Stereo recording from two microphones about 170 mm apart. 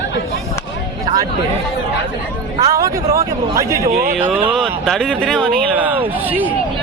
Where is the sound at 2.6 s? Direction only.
20° right (ahead or behind).